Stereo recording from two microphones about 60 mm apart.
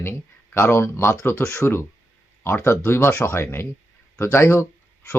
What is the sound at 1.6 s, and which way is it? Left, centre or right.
Speech, left.